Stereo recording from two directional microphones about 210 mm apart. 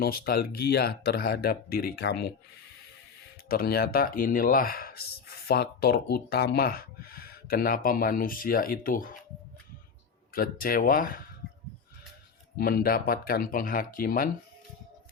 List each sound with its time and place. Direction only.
0.0 s speech: 45° left (ahead or behind)
3.5 s speech: 45° left (ahead or behind)
10.3 s speech: 45° left (ahead or behind)
12.5 s speech: 45° left (ahead or behind)